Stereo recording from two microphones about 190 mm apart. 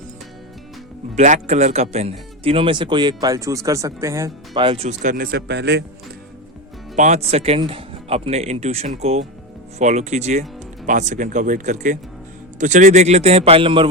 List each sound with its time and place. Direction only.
1.1 s speech: 40° right (ahead or behind); by 5.8 s 60° right (ahead or behind)
6.9 s speech: 40° right (ahead or behind)